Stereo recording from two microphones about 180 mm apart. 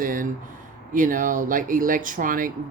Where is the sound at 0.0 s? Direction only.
50° right (ahead or behind).